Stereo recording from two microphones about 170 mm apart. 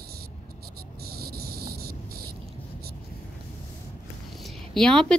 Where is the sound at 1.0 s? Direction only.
65° right (ahead or behind).